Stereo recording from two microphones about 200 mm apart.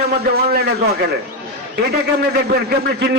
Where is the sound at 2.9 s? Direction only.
55° right (ahead or behind).